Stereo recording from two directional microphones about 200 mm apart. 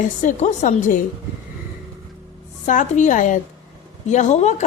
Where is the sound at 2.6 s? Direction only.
40° left (ahead or behind).